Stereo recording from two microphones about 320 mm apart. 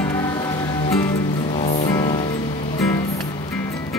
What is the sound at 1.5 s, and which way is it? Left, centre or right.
Music, centre.